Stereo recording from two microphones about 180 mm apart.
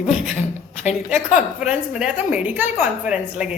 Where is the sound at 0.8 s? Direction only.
40° left (ahead or behind).